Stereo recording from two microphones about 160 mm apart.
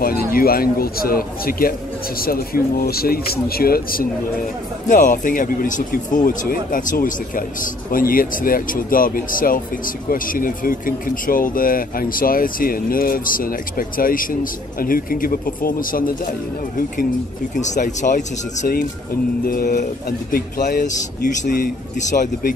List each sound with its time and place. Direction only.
0.0 s speech: 65° left (ahead or behind)
4.8 s speech: 55° left (ahead or behind)
17.6 s speech: 50° left (ahead or behind)
20.1 s speech: 70° left (ahead or behind); by 22.5 s 55° left (ahead or behind)